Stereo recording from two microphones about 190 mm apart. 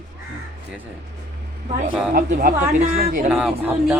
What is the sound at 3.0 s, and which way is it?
Speech, 55° right (ahead or behind).